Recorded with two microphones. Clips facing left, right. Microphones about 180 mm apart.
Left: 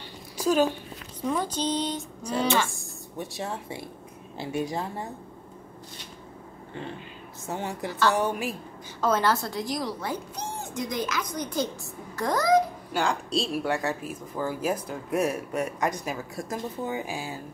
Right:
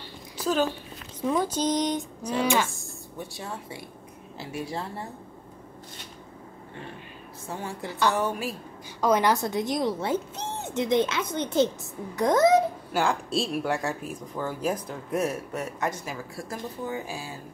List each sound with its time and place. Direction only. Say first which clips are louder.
0.5 s speech: left 3 dB; 10° left (ahead or behind)
1.2 s speech: right 2 dB; 10° right (ahead or behind)
3.3 s a woman's voice: left 3 dB; 25° left (ahead or behind)
7.4 s a woman's voice: left 3 dB; 20° left (ahead or behind)
9.0 s speech: right 2 dB; 15° right (ahead or behind)
12.9 s speech: even; centre (ahead or behind); by 17.3 s 15° left (ahead or behind)